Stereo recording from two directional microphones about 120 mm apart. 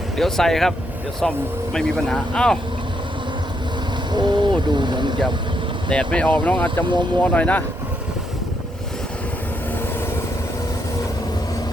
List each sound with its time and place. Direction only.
0.2 s speech: 5° left (ahead or behind)
4.1 s speech: 40° right (ahead or behind)
5.9 s speech: 10° left (ahead or behind)